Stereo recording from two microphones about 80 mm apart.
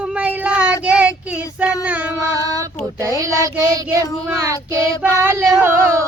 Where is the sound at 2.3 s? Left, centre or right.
Right.